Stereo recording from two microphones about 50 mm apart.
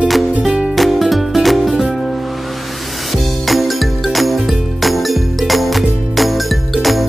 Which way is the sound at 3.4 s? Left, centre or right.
Centre.